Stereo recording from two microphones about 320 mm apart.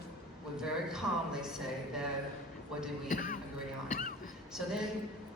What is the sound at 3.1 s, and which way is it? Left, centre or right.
Speech, left.